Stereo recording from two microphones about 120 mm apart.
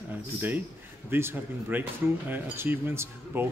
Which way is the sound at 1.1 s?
20° right (ahead or behind).